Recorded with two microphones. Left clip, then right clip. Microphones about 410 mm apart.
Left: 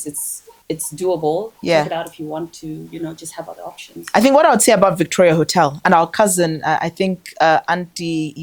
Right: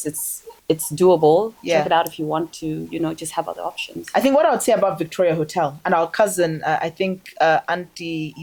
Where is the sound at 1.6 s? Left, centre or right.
Left.